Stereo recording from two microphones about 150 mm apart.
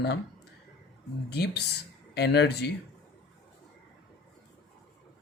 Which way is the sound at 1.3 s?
90° left.